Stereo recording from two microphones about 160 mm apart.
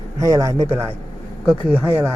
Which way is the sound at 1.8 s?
10° right (ahead or behind).